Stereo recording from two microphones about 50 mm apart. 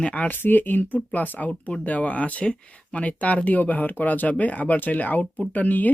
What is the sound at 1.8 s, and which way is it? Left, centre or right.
Speech, left.